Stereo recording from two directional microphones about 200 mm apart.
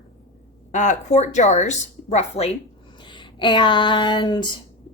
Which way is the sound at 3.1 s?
25° left (ahead or behind).